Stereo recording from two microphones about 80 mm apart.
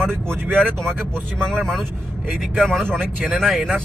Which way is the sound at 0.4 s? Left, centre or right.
Right.